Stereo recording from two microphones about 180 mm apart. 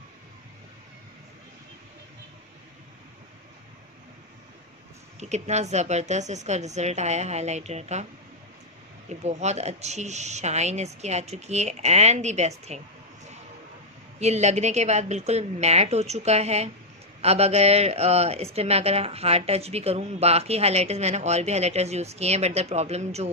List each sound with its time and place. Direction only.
5.2 s speech: 40° right (ahead or behind)
9.2 s speech: 40° right (ahead or behind)